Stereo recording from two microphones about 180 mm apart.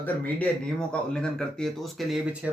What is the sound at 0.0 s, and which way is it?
Speech, 10° left (ahead or behind).